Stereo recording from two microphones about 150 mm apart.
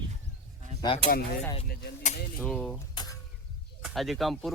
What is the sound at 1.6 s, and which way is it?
Speech, 90° left.